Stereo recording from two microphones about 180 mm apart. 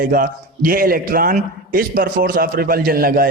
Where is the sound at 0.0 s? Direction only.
50° right (ahead or behind).